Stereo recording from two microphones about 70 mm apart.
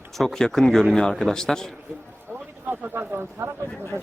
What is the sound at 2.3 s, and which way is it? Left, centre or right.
Speech, right.